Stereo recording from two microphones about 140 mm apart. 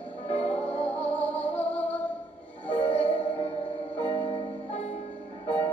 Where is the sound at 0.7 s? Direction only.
45° left (ahead or behind).